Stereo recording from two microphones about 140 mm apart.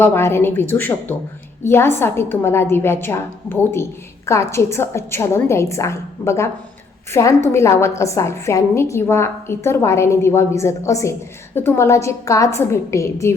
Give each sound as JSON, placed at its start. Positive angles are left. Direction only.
{"t": 0.0, "sound": "a woman's voice", "side_deg": 15}